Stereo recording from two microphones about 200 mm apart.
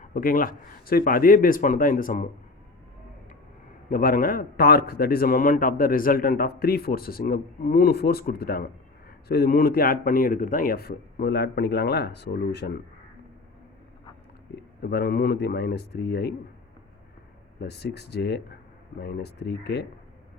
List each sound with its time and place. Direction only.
0.0 s a man's voice: 45° left (ahead or behind)
3.8 s a man's voice: 45° left (ahead or behind)
14.5 s a man's voice: 50° left (ahead or behind)
17.6 s speech: 55° left (ahead or behind)